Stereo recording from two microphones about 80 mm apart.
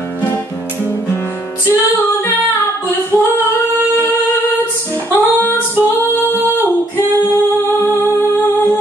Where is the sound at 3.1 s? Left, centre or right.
Left.